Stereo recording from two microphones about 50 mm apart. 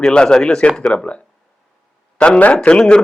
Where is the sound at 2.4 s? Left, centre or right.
Left.